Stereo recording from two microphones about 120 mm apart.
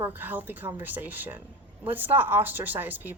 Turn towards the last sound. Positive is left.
turn(degrees=-15)  # may be behind; listen again after turning